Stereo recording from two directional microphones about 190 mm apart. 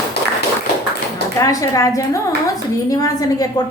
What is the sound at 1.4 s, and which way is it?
A woman's voice, 15° left (ahead or behind).